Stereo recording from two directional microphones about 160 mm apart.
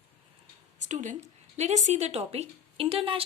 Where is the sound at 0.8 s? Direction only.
50° right (ahead or behind).